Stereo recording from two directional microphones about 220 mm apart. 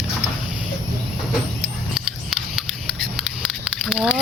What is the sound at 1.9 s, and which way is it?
Scissors, centre (ahead or behind).